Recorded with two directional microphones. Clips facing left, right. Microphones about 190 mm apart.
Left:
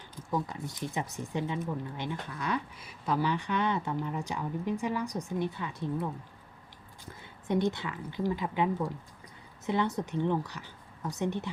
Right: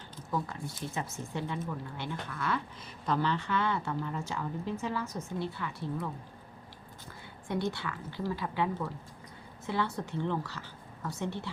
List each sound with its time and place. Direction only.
0.3 s speech: 15° left (ahead or behind)
7.4 s a woman's voice: 20° left (ahead or behind)